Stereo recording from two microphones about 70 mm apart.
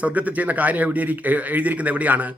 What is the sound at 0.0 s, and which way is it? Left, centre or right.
Speech, right.